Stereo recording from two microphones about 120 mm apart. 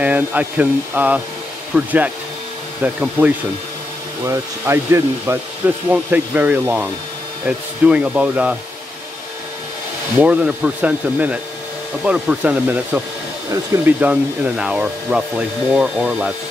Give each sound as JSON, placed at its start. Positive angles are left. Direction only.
{"t": 0.0, "sound": "speech", "side_deg": -15}
{"t": 4.2, "sound": "speech", "side_deg": -25}
{"t": 10.1, "sound": "speech", "side_deg": -10}